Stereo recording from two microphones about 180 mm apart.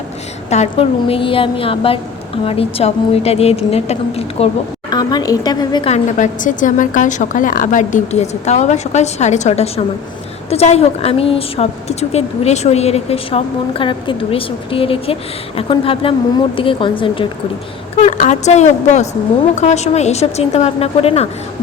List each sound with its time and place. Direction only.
0.5 s a woman's voice: 35° left (ahead or behind)
4.9 s a woman's voice: 20° left (ahead or behind)
5.9 s a woman's voice: 40° left (ahead or behind)
18.2 s a woman's voice: 40° left (ahead or behind)